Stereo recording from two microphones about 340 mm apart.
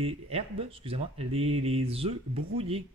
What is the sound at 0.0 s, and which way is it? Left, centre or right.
Speech, centre.